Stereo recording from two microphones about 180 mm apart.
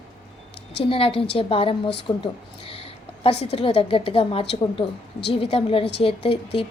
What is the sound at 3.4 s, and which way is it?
A woman's voice, 35° left (ahead or behind).